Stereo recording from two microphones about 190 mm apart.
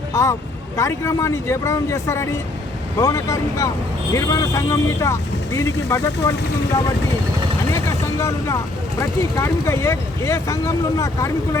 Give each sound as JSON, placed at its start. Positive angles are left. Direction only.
{"t": 0.1, "sound": "speech", "side_deg": 15}
{"t": 8.2, "sound": "speech", "side_deg": 15}